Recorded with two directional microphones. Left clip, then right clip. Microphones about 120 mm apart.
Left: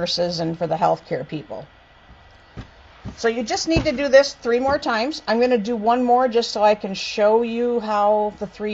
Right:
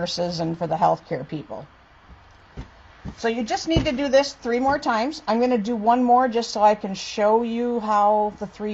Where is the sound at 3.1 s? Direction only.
25° left (ahead or behind).